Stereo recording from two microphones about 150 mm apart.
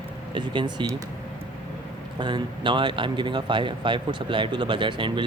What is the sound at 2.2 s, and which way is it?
Speech, 30° right (ahead or behind).